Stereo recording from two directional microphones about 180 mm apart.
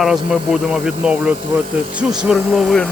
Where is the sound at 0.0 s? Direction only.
5° right (ahead or behind).